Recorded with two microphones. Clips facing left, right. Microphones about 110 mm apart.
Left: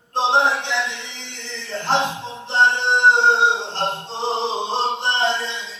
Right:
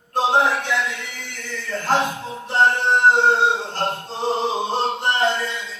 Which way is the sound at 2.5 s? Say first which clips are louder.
Even; 25° left (ahead or behind).